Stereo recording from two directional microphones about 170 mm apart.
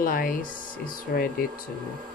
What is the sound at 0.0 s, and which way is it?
Speech, 55° left (ahead or behind).